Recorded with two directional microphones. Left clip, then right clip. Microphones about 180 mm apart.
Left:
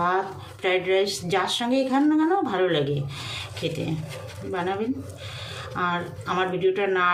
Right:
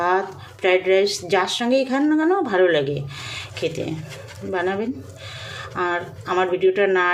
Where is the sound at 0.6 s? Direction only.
45° right (ahead or behind).